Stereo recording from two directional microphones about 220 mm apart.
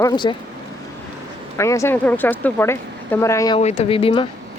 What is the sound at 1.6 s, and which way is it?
A woman's voice, 15° left (ahead or behind).